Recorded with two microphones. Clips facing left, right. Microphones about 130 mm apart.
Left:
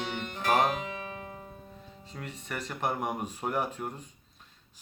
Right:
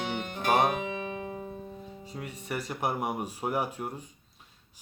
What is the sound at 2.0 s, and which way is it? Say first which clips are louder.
Speech: right 2 dB; 10° right (ahead or behind).